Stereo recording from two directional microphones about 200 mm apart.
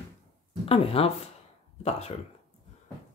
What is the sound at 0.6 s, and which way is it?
Speech, 30° left (ahead or behind).